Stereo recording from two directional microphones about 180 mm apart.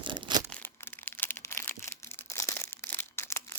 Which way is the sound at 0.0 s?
25° right (ahead or behind).